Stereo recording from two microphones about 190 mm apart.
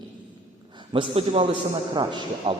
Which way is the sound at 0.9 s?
30° right (ahead or behind).